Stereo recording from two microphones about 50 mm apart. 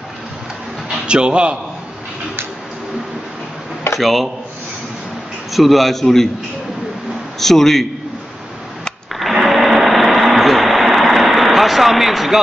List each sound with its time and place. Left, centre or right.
1.0 s a man's voice: centre
4.0 s a man's voice: centre
5.5 s a man's voice: centre
7.3 s a man's voice: centre
9.1 s a sound: centre